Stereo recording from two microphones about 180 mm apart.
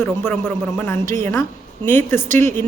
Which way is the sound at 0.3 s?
15° left (ahead or behind).